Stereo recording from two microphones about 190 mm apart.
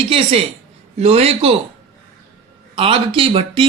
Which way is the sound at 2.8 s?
30° right (ahead or behind).